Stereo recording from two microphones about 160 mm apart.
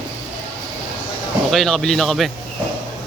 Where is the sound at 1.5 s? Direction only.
Centre (ahead or behind).